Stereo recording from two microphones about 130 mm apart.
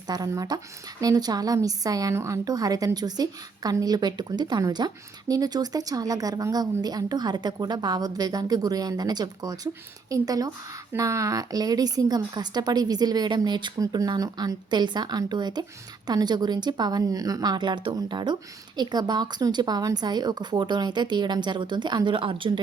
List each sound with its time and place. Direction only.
0.1 s speech: 30° right (ahead or behind)